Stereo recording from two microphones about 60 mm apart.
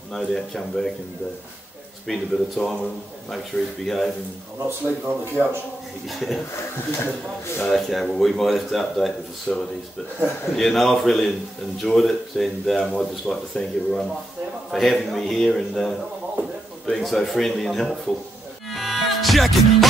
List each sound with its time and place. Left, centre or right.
0.1 s speech: centre
2.0 s speech: centre
4.6 s speech: right
6.0 s speech: centre
7.6 s speech: centre
13.3 s speech: centre
14.7 s speech: centre
18.7 s music: centre